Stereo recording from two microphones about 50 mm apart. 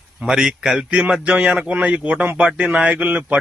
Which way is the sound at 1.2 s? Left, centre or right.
Right.